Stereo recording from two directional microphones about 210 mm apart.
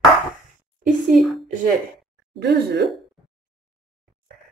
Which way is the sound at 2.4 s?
55° right (ahead or behind).